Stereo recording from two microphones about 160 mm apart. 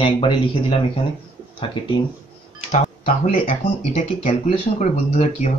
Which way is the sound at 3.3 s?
40° left (ahead or behind).